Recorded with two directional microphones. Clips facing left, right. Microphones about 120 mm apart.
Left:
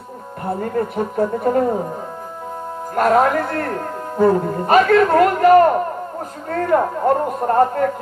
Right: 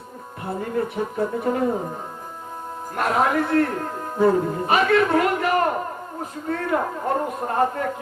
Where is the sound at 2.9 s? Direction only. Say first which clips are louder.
Left 8 dB; 45° left (ahead or behind).